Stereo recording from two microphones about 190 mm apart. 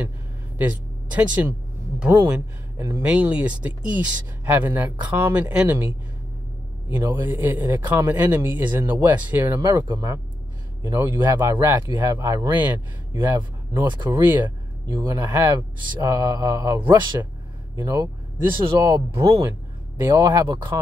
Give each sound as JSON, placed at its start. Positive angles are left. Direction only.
{"t": 0.6, "sound": "speech", "side_deg": -10}
{"t": 13.8, "sound": "speech", "side_deg": -25}
{"t": 14.2, "sound": "speech", "side_deg": -10}